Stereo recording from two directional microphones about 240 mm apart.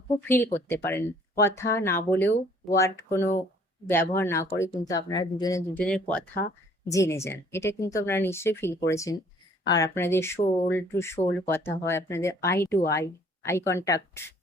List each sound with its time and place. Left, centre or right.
0.3 s speech: centre